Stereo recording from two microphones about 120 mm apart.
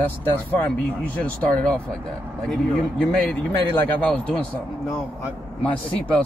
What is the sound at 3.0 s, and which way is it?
A man's voice, 5° left (ahead or behind).